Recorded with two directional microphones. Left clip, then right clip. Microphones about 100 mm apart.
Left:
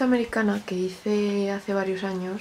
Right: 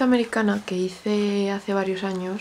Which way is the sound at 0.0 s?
15° right (ahead or behind).